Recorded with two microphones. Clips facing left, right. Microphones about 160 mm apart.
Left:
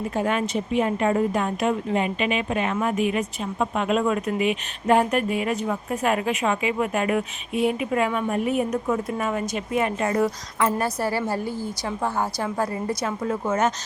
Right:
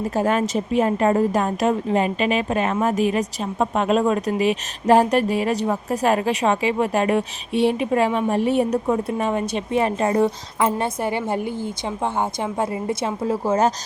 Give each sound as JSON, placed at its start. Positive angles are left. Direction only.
{"t": 0.1, "sound": "a woman's voice", "side_deg": -40}